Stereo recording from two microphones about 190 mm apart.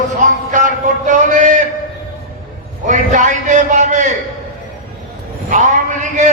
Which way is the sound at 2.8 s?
40° right (ahead or behind).